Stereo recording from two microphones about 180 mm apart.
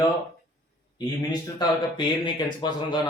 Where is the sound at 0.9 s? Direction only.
25° left (ahead or behind).